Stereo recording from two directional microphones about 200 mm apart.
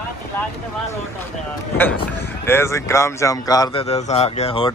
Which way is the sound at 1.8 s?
10° left (ahead or behind).